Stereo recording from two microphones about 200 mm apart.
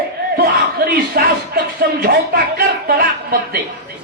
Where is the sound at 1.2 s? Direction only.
50° right (ahead or behind).